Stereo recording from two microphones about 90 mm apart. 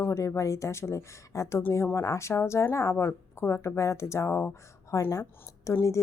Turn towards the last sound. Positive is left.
turn(degrees=35)  # may be behind; listen again after turning